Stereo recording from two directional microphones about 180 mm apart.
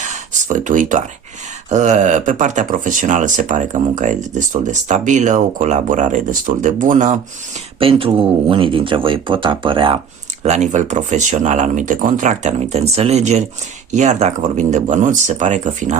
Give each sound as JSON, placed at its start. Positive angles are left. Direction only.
{"t": 0.0, "sound": "a sound", "side_deg": -40}
{"t": 1.7, "sound": "speech", "side_deg": -40}
{"t": 7.8, "sound": "speech", "side_deg": -30}
{"t": 10.4, "sound": "speech", "side_deg": -40}